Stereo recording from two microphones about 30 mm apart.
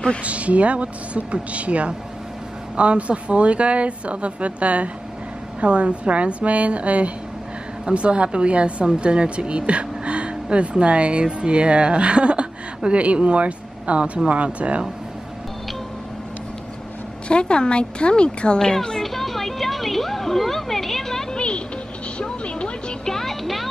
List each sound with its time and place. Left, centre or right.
0.2 s a woman's voice: right
8.8 s a woman's voice: right
17.3 s speech: left
18.6 s speech: left
19.0 s a sound: centre
21.4 s music: left
23.2 s music: centre